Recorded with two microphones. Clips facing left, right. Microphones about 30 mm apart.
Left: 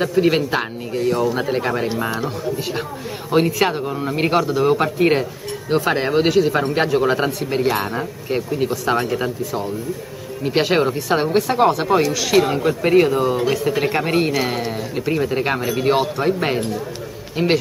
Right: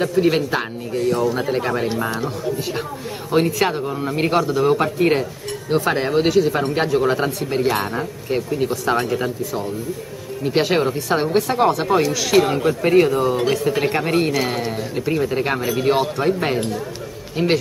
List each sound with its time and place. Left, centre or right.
0.0 s a man's voice: centre